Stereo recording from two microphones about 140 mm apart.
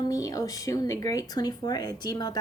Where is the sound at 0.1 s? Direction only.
25° left (ahead or behind).